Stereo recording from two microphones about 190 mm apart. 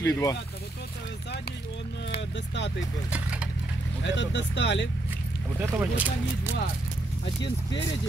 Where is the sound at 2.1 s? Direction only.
65° left (ahead or behind).